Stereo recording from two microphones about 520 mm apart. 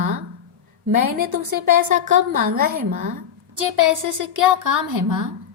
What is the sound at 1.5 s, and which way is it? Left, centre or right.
Speech, centre.